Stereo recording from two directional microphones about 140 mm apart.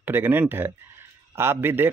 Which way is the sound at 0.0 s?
15° right (ahead or behind).